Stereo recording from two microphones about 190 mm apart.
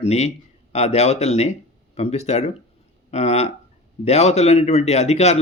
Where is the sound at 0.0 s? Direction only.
35° left (ahead or behind).